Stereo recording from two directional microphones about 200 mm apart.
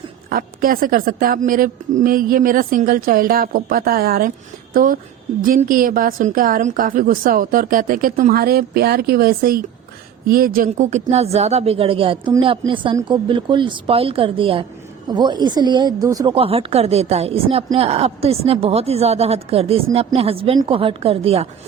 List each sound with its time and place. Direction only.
0.3 s a woman's voice: 45° right (ahead or behind); by 16.3 s 15° right (ahead or behind)
16.3 s a woman's voice: 30° right (ahead or behind)